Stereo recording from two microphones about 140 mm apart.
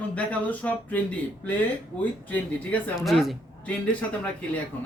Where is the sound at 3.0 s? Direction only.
Centre (ahead or behind).